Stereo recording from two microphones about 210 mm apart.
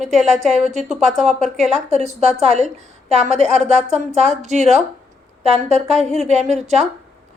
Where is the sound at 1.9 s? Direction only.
30° right (ahead or behind).